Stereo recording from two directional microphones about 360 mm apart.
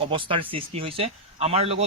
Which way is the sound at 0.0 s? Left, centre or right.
Centre.